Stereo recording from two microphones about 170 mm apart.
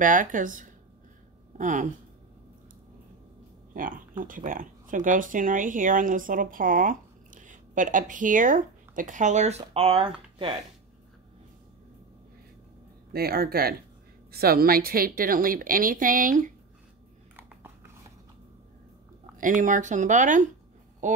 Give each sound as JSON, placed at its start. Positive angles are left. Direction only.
{"t": 0.0, "sound": "speech", "side_deg": -50}
{"t": 3.7, "sound": "speech", "side_deg": -55}
{"t": 13.1, "sound": "a woman's voice", "side_deg": -65}
{"t": 19.3, "sound": "speech", "side_deg": -50}